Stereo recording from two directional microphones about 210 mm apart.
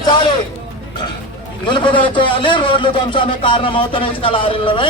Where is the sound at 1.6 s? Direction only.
20° left (ahead or behind).